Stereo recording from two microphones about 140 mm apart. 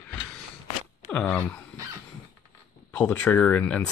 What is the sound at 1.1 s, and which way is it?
Speech, 5° left (ahead or behind).